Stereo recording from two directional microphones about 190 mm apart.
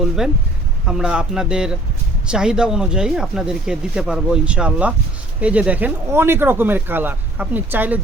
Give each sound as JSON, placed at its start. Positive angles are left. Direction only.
{"t": 0.9, "sound": "speech", "side_deg": -5}